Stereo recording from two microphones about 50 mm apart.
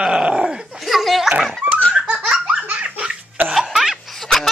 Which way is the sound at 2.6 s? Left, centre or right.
Right.